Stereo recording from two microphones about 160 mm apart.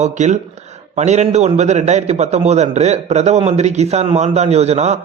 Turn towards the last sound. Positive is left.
turn(degrees=-45)  # may be behind; listen again after turning